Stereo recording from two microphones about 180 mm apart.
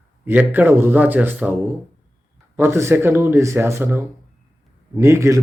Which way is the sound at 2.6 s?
15° right (ahead or behind).